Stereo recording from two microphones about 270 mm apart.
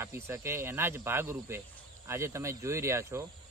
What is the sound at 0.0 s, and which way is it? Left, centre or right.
Speech, centre.